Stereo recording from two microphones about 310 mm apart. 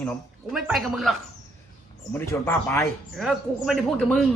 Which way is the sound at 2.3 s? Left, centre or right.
Centre.